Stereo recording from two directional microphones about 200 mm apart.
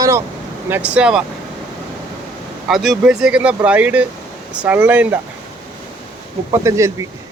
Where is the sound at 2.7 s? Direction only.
Centre (ahead or behind).